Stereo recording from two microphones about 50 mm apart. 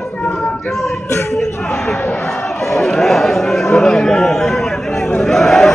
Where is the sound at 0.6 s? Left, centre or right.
Centre.